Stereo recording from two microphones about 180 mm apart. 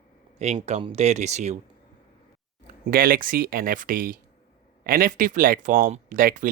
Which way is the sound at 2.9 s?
55° right (ahead or behind).